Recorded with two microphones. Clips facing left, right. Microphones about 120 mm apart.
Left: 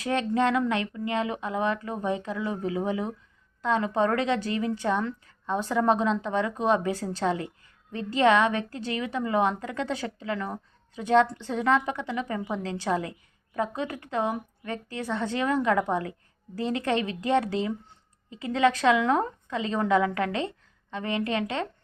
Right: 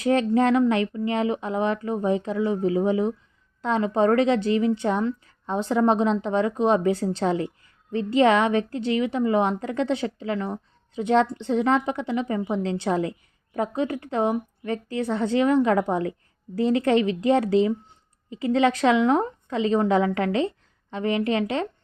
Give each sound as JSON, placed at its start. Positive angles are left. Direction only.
{"t": 0.0, "sound": "a woman's voice", "side_deg": -30}